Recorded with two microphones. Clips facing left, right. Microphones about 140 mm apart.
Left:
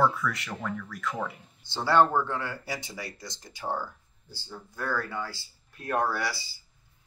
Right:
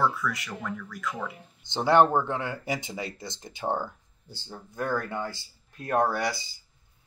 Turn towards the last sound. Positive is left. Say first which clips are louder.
# right 3 dB
turn(degrees=-20)  # may be behind; listen again after turning